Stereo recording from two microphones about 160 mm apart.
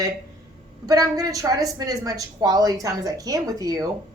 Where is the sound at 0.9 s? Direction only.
20° right (ahead or behind).